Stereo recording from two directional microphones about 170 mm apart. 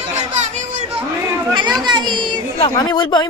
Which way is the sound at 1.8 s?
25° right (ahead or behind).